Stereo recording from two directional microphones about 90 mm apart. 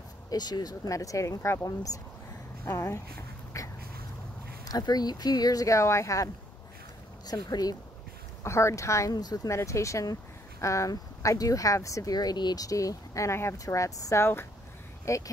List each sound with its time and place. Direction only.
0.3 s speech: 50° left (ahead or behind)
4.6 s speech: 45° left (ahead or behind)
8.5 s speech: 30° left (ahead or behind); by 9.5 s 45° left (ahead or behind)
9.5 s speech: 35° left (ahead or behind)